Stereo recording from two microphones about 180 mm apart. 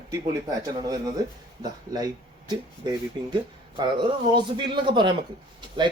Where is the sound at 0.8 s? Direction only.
20° right (ahead or behind).